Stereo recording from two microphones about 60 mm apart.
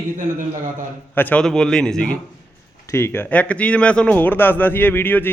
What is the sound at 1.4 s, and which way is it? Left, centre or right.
Speech, centre.